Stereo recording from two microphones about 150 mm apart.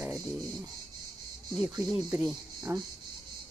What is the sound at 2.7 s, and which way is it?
Speech, 15° right (ahead or behind).